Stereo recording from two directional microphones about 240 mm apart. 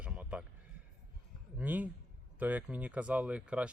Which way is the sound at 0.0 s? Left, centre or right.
Centre.